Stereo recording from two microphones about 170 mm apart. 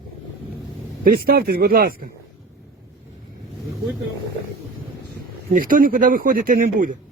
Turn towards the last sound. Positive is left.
turn(degrees=-55)  # may be behind; listen again after turning